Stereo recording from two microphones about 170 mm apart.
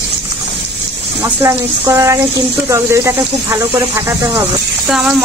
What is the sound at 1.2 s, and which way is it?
Speech, 15° right (ahead or behind).